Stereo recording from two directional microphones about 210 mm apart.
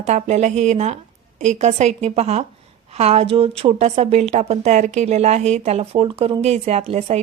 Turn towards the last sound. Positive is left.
turn(degrees=-30)  # may be behind; listen again after turning